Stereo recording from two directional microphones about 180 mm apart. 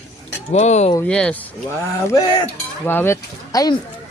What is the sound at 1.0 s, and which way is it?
Speech, 5° left (ahead or behind).